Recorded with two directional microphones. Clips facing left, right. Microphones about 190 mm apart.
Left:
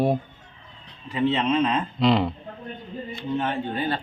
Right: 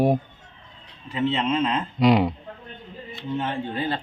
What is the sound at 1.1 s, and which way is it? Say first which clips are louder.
Speech: left 1 dB; 15° left (ahead or behind).